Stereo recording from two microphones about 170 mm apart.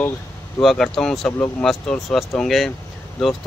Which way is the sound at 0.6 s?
Centre (ahead or behind).